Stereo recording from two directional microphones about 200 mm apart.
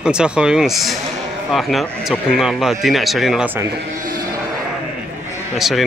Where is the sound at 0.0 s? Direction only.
5° right (ahead or behind).